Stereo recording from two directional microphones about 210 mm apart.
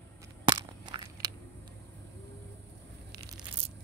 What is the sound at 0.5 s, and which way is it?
Biting, 20° right (ahead or behind).